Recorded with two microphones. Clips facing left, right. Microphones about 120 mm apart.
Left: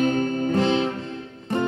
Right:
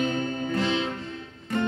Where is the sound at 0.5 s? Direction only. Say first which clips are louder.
Left 5 dB; 45° left (ahead or behind).